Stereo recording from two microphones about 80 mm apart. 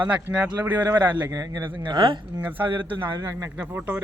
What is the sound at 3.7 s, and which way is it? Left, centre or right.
Speech, right.